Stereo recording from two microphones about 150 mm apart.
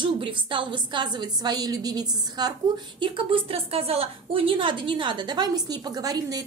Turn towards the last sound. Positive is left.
turn(degrees=-25)  # may be behind; listen again after turning